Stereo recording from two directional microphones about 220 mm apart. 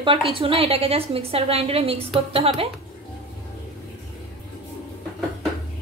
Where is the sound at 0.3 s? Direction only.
25° right (ahead or behind).